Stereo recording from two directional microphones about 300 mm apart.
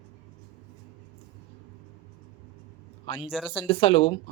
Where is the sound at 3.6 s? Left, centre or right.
Centre.